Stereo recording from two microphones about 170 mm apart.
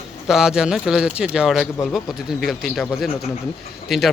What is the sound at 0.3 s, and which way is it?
Speech, 5° right (ahead or behind).